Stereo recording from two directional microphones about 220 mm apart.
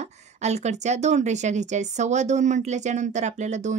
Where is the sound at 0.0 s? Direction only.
30° right (ahead or behind).